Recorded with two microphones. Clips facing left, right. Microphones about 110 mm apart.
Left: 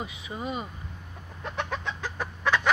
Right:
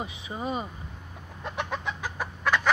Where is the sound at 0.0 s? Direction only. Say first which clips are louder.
Right 1 dB; 30° right (ahead or behind).